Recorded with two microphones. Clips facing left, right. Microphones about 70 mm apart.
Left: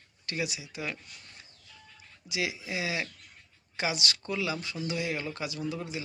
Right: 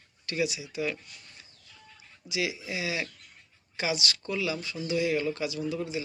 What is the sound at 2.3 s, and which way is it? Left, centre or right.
Speech, left.